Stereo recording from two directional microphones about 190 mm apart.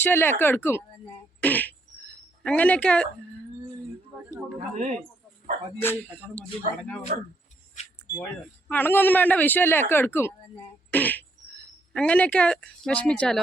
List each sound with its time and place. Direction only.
0.0 s a man's voice: 10° left (ahead or behind)
4.5 s speech: 40° right (ahead or behind)
5.8 s a man's voice: 10° left (ahead or behind)
7.1 s speech: 40° right (ahead or behind)
8.1 s a man's voice: 10° left (ahead or behind)
10.9 s a sound: 10° left (ahead or behind)
11.9 s a man's voice: 5° left (ahead or behind)